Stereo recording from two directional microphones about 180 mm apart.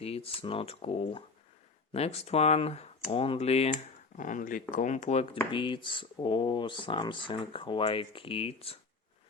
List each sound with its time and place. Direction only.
0.0 s speech: 35° left (ahead or behind)
4.2 s speech: 50° left (ahead or behind)
5.5 s speech: 25° left (ahead or behind)